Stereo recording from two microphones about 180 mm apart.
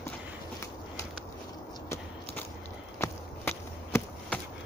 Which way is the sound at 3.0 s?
10° left (ahead or behind).